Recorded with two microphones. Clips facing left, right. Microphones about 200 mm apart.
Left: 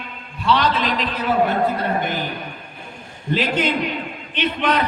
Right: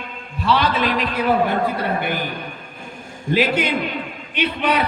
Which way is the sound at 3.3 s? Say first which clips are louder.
Right 2 dB; 10° right (ahead or behind).